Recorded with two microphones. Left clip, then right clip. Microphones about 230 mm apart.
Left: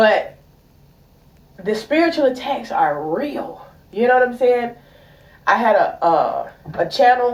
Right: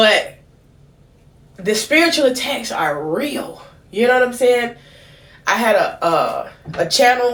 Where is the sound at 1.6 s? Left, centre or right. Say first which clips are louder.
Right 3 dB; right.